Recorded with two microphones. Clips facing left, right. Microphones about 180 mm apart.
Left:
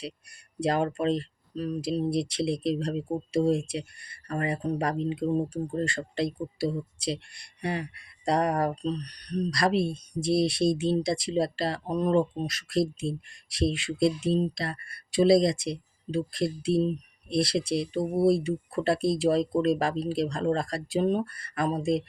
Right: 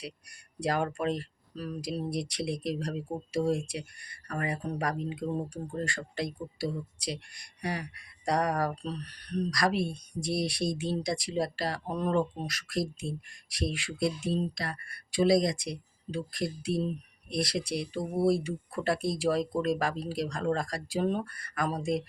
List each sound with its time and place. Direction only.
0.6 s speech: 25° left (ahead or behind)